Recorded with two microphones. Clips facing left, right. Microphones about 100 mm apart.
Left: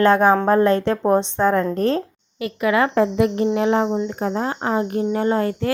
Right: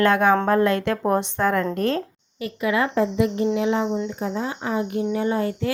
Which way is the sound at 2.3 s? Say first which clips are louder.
Left 4 dB; 70° left (ahead or behind).